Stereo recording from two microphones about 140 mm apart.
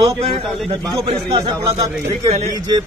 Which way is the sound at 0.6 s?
30° right (ahead or behind).